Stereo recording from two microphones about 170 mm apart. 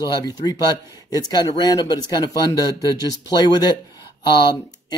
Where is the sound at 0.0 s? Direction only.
20° left (ahead or behind).